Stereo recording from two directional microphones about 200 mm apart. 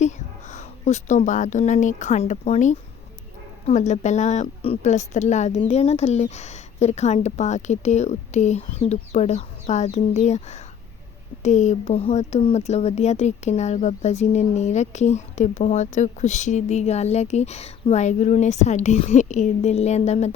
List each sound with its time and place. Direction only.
0.0 s speech: 35° left (ahead or behind)